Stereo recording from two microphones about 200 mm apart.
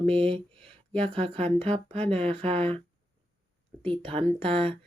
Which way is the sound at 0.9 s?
30° right (ahead or behind).